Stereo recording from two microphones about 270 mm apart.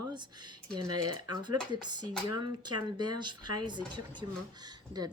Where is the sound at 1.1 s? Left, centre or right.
Centre.